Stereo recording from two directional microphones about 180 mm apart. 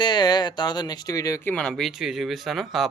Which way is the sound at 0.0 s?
25° left (ahead or behind).